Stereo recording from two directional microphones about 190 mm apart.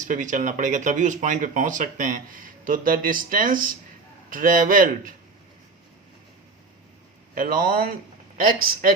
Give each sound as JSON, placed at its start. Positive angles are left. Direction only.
{"t": 0.0, "sound": "speech", "side_deg": -40}
{"t": 7.3, "sound": "speech", "side_deg": -45}